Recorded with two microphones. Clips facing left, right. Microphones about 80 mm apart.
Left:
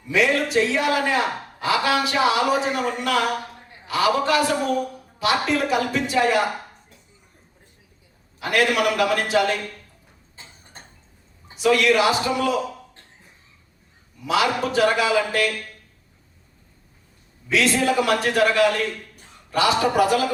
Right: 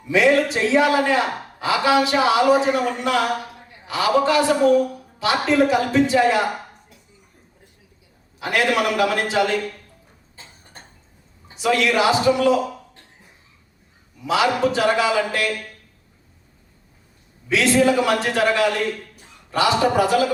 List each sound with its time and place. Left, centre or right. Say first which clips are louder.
0.1 s a man's voice: right 3 dB; right
8.4 s a man's voice: even; right
10.3 s a sound: right 1 dB; left
11.5 s a man's voice: left 1 dB; right
14.3 s a man's voice: right 2 dB; right
17.5 s a man's voice: right 3 dB; right